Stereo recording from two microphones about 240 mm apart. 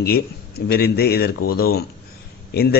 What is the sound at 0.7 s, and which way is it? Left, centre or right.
A man's voice, left.